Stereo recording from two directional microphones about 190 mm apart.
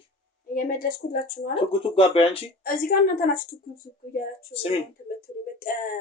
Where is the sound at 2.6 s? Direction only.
50° left (ahead or behind).